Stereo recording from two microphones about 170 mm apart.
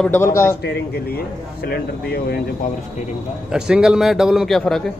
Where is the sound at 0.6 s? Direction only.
70° left (ahead or behind).